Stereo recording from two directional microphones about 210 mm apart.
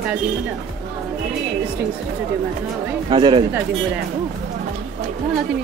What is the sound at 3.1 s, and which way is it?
Speech, 20° right (ahead or behind).